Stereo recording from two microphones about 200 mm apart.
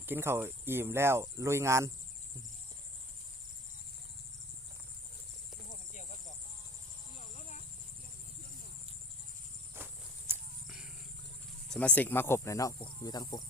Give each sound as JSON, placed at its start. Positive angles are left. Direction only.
{"t": 0.0, "sound": "speech", "side_deg": -10}
{"t": 5.6, "sound": "a sound", "side_deg": 40}
{"t": 9.7, "sound": "walk", "side_deg": -10}
{"t": 11.7, "sound": "speech", "side_deg": 5}